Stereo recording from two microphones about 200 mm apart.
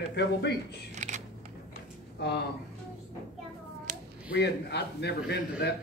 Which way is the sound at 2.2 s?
55° left (ahead or behind).